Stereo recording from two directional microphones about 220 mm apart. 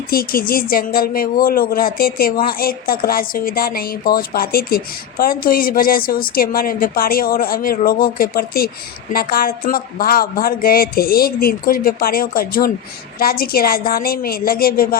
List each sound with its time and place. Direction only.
0.1 s a woman's voice: 40° left (ahead or behind)